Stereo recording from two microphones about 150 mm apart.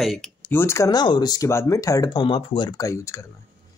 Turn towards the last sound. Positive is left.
turn(degrees=20)  # may be behind; listen again after turning